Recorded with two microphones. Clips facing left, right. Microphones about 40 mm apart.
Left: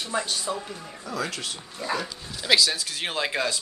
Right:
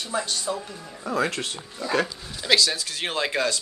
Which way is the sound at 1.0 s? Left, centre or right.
Right.